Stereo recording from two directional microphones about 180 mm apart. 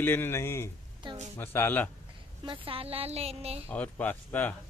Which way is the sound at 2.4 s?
30° right (ahead or behind).